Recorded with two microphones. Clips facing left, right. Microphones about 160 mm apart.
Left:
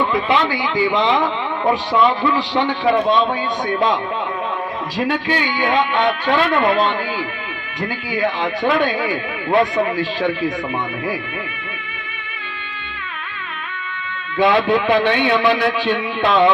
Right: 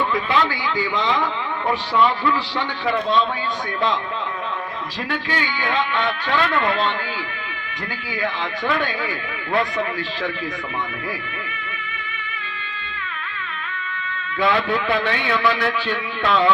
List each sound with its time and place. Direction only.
0.1 s a man's voice: 20° left (ahead or behind)
4.9 s a man's voice: 20° left (ahead or behind)
8.1 s a man's voice: 25° left (ahead or behind)
14.3 s a man's voice: 20° left (ahead or behind)